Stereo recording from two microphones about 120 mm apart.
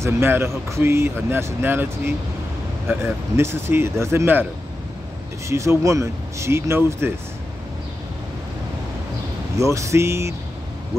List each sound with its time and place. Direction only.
0.0 s speech: 20° right (ahead or behind)
5.5 s speech: 25° right (ahead or behind)
9.6 s speech: 25° right (ahead or behind)